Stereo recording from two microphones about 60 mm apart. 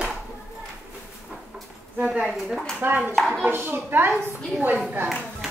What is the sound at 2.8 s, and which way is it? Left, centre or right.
Hands, right.